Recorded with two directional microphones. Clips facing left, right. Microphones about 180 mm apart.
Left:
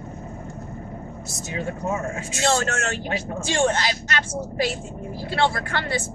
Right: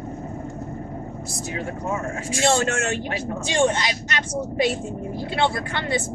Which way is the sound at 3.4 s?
20° right (ahead or behind).